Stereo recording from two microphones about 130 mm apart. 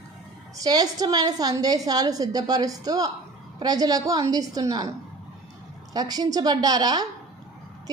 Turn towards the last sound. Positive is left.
turn(degrees=-30)  # may be behind; listen again after turning